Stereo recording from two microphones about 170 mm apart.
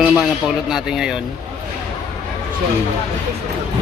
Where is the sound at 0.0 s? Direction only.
5° right (ahead or behind).